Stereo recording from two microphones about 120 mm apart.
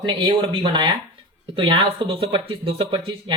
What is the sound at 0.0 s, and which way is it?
Speech, 45° right (ahead or behind).